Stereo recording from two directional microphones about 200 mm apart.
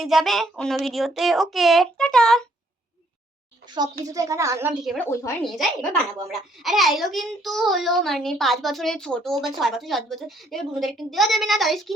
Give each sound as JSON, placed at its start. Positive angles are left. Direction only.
{"t": 0.0, "sound": "a child's voice", "side_deg": 0}
{"t": 4.0, "sound": "a woman's voice", "side_deg": -15}
{"t": 4.9, "sound": "a woman's voice", "side_deg": 10}
{"t": 5.4, "sound": "a child's voice", "side_deg": 0}